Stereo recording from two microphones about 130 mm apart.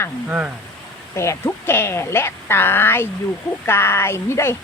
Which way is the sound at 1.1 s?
20° left (ahead or behind).